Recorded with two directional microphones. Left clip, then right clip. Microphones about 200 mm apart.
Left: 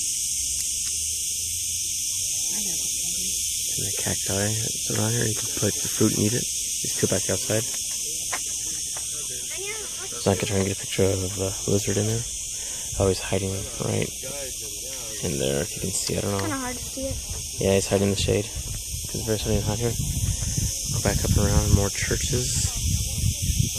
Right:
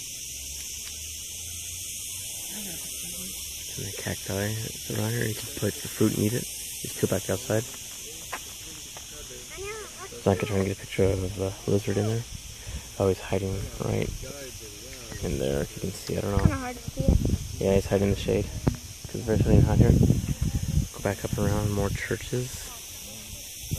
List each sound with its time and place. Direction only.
4.0 s speech: 5° left (ahead or behind)
10.2 s speech: centre (ahead or behind)
15.2 s speech: 5° left (ahead or behind)
16.4 s speech: 40° left (ahead or behind)
17.6 s speech: 5° left (ahead or behind)
21.0 s speech: 5° left (ahead or behind)